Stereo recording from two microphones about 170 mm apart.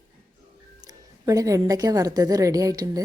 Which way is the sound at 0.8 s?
20° right (ahead or behind).